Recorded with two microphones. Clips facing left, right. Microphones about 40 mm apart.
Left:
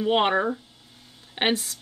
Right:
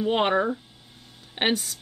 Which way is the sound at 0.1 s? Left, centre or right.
Centre.